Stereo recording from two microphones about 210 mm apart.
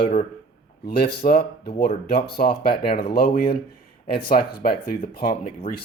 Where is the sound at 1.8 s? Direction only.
50° left (ahead or behind).